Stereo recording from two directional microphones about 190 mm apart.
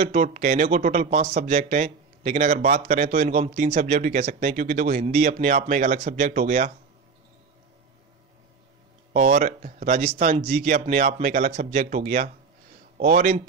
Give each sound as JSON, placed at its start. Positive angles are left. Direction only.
{"t": 0.0, "sound": "speech", "side_deg": -40}
{"t": 9.1, "sound": "speech", "side_deg": -45}